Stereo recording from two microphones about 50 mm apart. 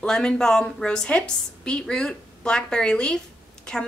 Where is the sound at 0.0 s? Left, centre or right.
Centre.